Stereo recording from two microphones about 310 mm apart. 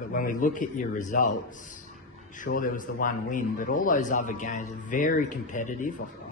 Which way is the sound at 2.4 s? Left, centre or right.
Left.